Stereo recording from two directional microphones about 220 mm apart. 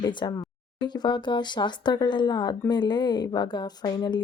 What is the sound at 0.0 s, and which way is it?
Speech, 20° left (ahead or behind).